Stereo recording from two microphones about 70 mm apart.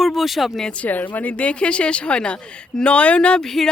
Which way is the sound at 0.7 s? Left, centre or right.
Left.